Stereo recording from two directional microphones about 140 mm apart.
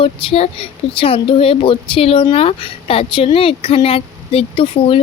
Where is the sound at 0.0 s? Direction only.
40° left (ahead or behind).